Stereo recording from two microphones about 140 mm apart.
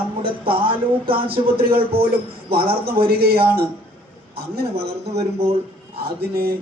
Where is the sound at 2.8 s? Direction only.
90° right.